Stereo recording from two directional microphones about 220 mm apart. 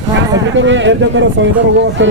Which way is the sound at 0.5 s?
55° right (ahead or behind).